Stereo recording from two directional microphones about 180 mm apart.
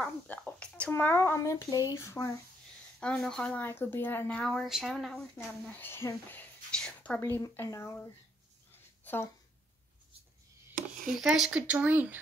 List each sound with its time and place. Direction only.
0.0 s speech: 10° left (ahead or behind)
3.0 s speech: 5° left (ahead or behind)
5.7 s a woman's voice: 10° left (ahead or behind)
9.0 s a sound: 10° left (ahead or behind)
10.7 s a sound: 50° right (ahead or behind)
11.1 s speech: centre (ahead or behind)